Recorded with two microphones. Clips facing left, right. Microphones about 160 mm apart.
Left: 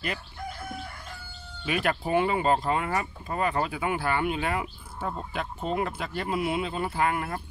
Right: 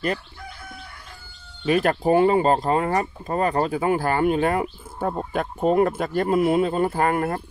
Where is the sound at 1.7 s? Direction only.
40° right (ahead or behind).